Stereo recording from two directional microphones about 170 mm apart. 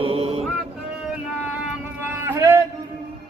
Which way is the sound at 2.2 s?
15° right (ahead or behind).